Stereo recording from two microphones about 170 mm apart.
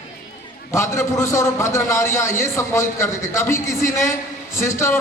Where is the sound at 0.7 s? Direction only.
15° left (ahead or behind).